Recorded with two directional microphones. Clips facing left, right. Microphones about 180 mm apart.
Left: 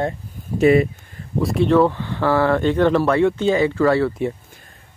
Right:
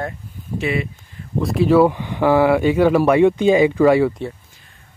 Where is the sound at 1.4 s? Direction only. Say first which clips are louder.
Right 2 dB; 5° right (ahead or behind).